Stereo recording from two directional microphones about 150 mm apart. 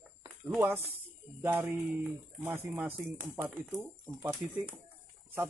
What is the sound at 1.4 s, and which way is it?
Speech, 15° right (ahead or behind).